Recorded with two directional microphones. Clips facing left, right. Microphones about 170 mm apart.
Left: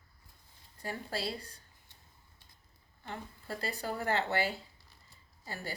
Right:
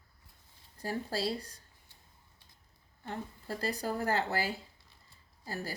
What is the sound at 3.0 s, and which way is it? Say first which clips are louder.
A woman's voice: right 3 dB; 40° right (ahead or behind).